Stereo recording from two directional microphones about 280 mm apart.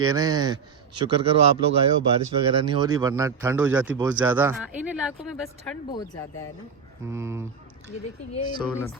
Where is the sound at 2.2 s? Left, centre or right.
Right.